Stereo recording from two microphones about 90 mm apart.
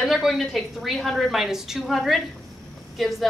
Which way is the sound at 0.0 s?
Centre (ahead or behind).